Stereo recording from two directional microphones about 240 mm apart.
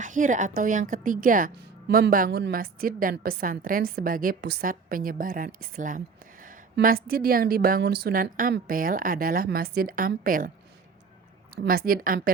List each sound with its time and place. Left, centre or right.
0.0 s speech: right
11.5 s speech: right